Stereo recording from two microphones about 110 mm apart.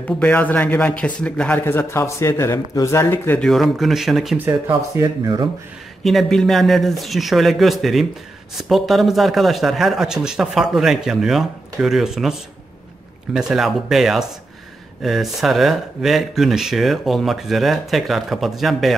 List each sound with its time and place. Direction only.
0.0 s a man's voice: 10° left (ahead or behind)
3.3 s speech: centre (ahead or behind)
4.5 s speech: 20° right (ahead or behind)
5.0 s speech: 35° right (ahead or behind)
6.0 s speech: centre (ahead or behind)